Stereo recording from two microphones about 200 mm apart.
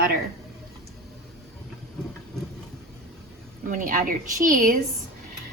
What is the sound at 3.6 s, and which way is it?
A woman's voice, 45° right (ahead or behind).